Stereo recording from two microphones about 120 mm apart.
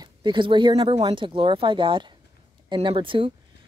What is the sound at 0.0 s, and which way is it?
Speech, 40° right (ahead or behind).